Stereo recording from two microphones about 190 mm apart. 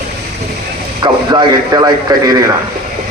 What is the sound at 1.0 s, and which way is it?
A man's voice, 25° right (ahead or behind).